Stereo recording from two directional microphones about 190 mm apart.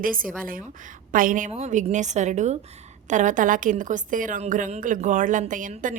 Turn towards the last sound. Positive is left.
turn(degrees=-45)  # may be behind; listen again after turning